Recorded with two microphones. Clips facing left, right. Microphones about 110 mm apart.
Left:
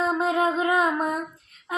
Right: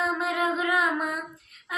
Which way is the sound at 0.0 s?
30° left (ahead or behind).